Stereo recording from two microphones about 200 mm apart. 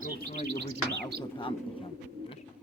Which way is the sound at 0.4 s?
55° right (ahead or behind).